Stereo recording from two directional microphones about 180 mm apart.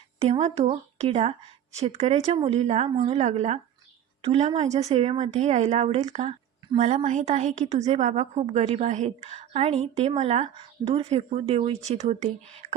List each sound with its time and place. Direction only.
0.2 s a woman's voice: 35° right (ahead or behind)